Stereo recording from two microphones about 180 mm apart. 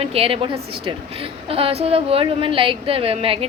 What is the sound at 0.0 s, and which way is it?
A woman's voice, 30° right (ahead or behind).